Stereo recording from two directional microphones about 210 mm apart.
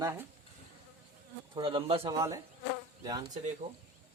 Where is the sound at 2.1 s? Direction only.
15° right (ahead or behind).